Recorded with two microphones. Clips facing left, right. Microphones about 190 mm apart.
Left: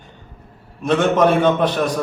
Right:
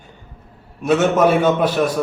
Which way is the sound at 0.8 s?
5° right (ahead or behind).